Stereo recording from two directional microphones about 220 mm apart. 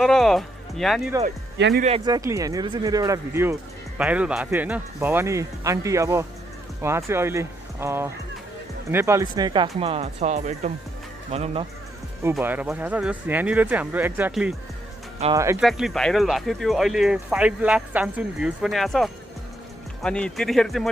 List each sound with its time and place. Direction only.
0.0 s speech: centre (ahead or behind)
1.8 s speech: 25° right (ahead or behind)
12.2 s speech: 10° right (ahead or behind)
15.6 s speech: centre (ahead or behind)